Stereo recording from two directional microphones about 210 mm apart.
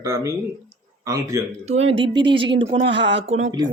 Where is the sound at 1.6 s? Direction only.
30° right (ahead or behind).